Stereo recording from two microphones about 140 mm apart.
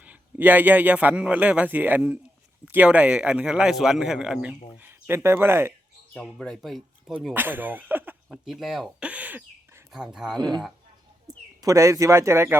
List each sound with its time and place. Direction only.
0.0 s a man's voice: 10° right (ahead or behind)
6.1 s speech: 5° left (ahead or behind)
7.3 s speech: 15° right (ahead or behind)
8.4 s speech: centre (ahead or behind)
10.3 s speech: 30° right (ahead or behind)
11.6 s speech: 20° right (ahead or behind)